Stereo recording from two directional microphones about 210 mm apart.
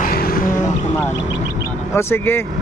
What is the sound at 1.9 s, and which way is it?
Speech, 10° left (ahead or behind).